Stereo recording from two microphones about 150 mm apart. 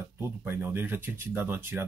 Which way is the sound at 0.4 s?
15° right (ahead or behind).